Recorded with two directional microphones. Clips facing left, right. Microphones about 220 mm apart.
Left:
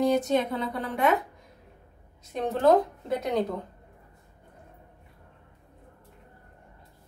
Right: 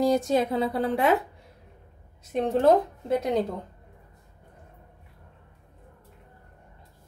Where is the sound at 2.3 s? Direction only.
25° right (ahead or behind).